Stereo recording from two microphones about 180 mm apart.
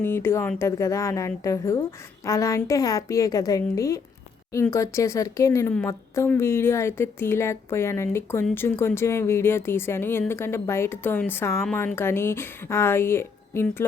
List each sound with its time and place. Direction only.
0.0 s speech: 15° left (ahead or behind)